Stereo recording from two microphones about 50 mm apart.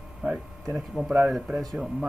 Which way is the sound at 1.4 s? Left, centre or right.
Centre.